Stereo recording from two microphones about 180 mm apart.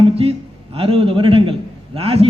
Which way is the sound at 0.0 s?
35° right (ahead or behind).